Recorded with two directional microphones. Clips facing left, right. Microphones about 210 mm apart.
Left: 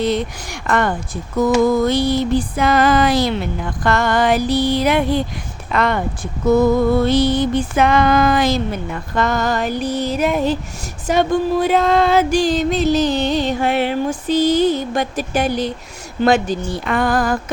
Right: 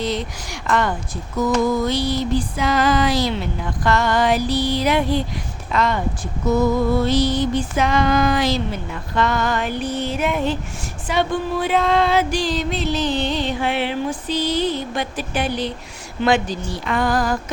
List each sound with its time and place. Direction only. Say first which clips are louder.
0.7 s music: left 2 dB; 55° left (ahead or behind)
1.4 s speech: left 4 dB; 55° left (ahead or behind)
3.8 s music: left 2 dB; 50° left (ahead or behind)
5.7 s speech: left 2 dB; 60° left (ahead or behind)
7.0 s music: left 3 dB; 55° left (ahead or behind)
16.2 s speech: left 3 dB; 45° left (ahead or behind)